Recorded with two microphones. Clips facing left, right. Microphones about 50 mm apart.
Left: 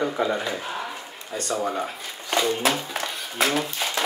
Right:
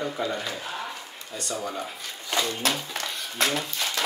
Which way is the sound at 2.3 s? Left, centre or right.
Centre.